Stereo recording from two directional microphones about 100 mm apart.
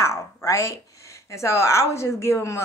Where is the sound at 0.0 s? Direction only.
25° left (ahead or behind).